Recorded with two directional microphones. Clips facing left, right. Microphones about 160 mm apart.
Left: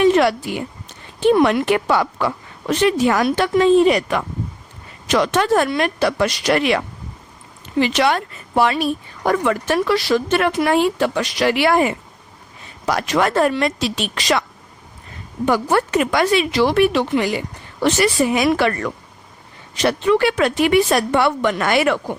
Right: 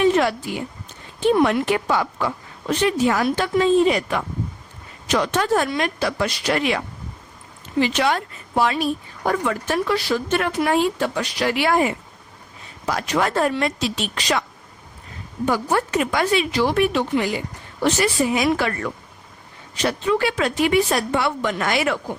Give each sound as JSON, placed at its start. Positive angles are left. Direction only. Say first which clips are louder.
{"t": 0.0, "sound": "a sound", "louder": "left 4 dB", "side_deg": 75}
{"t": 1.2, "sound": "a woman's voice", "louder": "left 3 dB", "side_deg": 70}
{"t": 5.1, "sound": "a woman's voice", "louder": "left 3 dB", "side_deg": 90}
{"t": 12.8, "sound": "a woman's voice", "louder": "left 3 dB", "side_deg": 80}
{"t": 15.4, "sound": "a woman's voice", "louder": "left 4 dB", "side_deg": 75}